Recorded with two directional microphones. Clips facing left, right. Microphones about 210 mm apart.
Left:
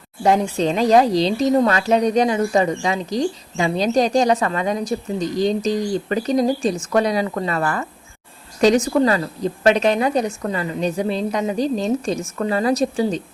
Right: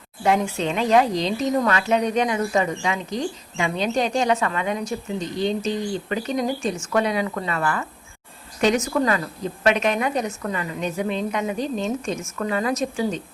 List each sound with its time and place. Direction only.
0.2 s speech: 35° left (ahead or behind)